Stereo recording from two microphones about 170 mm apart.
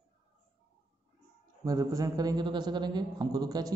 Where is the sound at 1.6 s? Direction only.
20° right (ahead or behind).